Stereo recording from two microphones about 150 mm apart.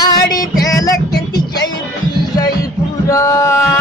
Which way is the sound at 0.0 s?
25° left (ahead or behind).